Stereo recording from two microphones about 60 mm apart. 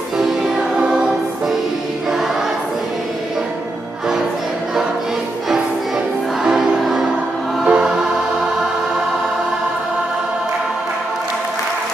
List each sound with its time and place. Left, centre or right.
0.2 s music: centre
0.7 s choir: centre
6.4 s music: centre
7.6 s music: right